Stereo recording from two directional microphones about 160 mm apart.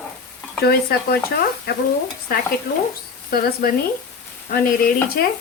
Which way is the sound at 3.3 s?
70° left (ahead or behind).